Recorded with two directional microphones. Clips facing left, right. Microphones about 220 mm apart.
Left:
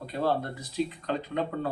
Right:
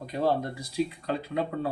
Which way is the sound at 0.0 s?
15° right (ahead or behind).